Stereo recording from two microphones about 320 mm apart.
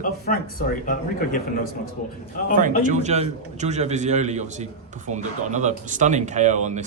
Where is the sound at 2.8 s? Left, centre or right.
Right.